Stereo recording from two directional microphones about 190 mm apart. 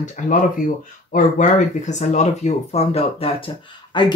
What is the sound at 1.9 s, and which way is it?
Speech, 40° left (ahead or behind).